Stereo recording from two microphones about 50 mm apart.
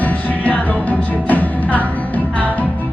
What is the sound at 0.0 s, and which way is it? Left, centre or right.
Music, left.